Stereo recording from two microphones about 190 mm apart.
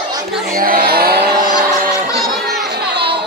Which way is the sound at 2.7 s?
60° right (ahead or behind).